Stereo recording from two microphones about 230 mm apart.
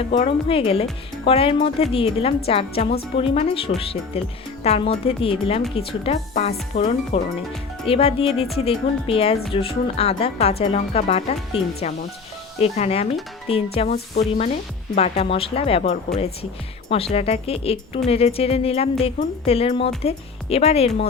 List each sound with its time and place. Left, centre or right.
0.0 s speech: left